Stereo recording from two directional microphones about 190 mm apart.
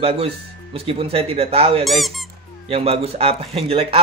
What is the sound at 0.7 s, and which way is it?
Speech, 30° right (ahead or behind).